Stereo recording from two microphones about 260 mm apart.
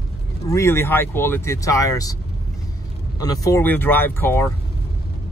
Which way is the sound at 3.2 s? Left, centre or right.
Centre.